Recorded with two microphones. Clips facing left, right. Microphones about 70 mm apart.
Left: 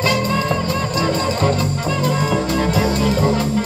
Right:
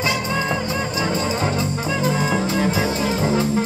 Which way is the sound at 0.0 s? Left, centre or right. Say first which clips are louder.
Left 4 dB; centre.